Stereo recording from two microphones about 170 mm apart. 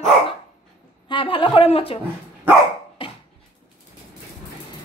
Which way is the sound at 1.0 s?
30° left (ahead or behind).